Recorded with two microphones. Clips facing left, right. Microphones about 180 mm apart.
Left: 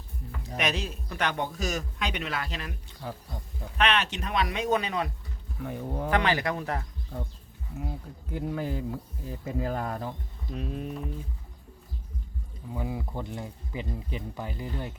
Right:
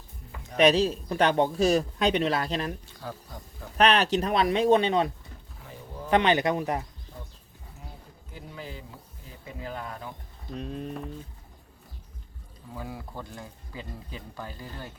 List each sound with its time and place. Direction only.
0.5 s a man's voice: 30° right (ahead or behind)
3.0 s speech: 15° left (ahead or behind)
3.8 s a man's voice: 35° right (ahead or behind); by 6.8 s 15° right (ahead or behind)
8.3 s speech: 55° left (ahead or behind)
10.5 s speech: 5° left (ahead or behind)
12.7 s speech: 20° left (ahead or behind)